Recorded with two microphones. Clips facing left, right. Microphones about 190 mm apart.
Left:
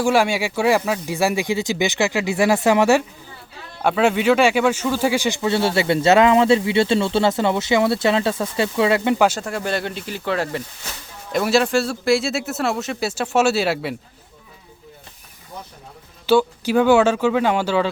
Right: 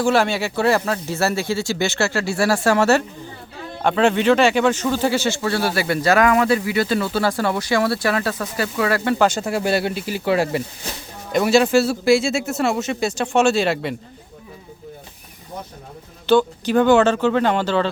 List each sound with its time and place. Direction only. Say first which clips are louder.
0.0 s speech: even; 10° left (ahead or behind)
9.4 s speech: right 4 dB; 10° right (ahead or behind)
11.3 s speech: right 2 dB; centre (ahead or behind)
16.2 s speech: even; 10° left (ahead or behind)